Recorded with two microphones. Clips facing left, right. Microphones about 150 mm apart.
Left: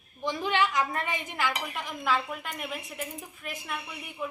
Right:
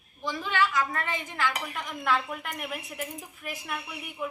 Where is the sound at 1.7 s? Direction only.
5° left (ahead or behind).